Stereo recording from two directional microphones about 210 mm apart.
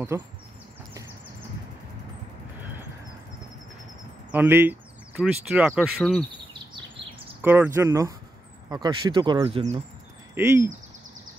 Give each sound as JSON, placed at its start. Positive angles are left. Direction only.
{"t": 0.1, "sound": "speech", "side_deg": -10}
{"t": 4.3, "sound": "speech", "side_deg": -10}
{"t": 7.4, "sound": "speech", "side_deg": -10}
{"t": 10.3, "sound": "speech", "side_deg": -10}